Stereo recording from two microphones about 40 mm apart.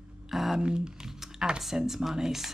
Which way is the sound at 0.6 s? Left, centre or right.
Right.